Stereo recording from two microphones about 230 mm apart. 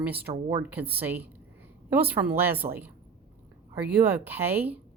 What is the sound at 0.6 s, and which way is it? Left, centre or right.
Speech, centre.